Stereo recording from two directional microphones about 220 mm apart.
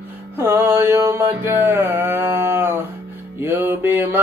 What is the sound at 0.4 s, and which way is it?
Mantra, 10° right (ahead or behind).